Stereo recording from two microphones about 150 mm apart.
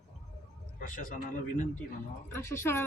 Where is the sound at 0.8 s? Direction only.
60° left (ahead or behind).